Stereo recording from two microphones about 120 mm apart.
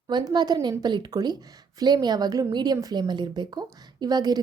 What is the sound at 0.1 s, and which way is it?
A woman's voice, 35° right (ahead or behind).